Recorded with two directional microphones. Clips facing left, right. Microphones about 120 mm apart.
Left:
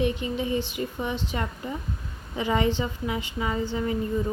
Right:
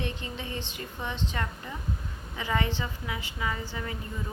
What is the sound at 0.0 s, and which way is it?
A woman's voice, 15° left (ahead or behind).